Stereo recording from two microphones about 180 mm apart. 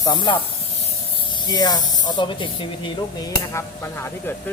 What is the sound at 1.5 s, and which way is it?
Speech, 20° left (ahead or behind).